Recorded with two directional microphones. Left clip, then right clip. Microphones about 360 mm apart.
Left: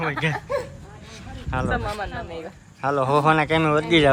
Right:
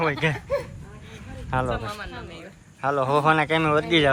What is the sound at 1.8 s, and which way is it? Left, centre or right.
Speech, left.